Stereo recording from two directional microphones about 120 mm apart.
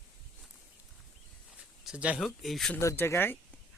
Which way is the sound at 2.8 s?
20° left (ahead or behind).